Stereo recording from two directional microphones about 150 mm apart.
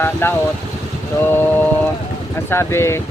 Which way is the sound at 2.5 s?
15° left (ahead or behind).